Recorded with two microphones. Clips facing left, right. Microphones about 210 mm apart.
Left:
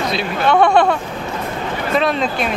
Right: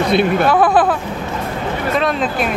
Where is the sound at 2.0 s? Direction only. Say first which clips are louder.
Left 1 dB; centre (ahead or behind).